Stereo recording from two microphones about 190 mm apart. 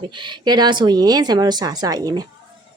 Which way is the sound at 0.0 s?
25° right (ahead or behind).